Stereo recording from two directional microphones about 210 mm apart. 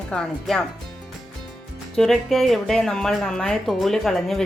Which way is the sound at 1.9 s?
Centre (ahead or behind).